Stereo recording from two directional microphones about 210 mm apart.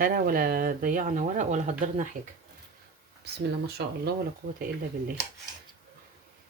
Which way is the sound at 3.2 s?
50° right (ahead or behind).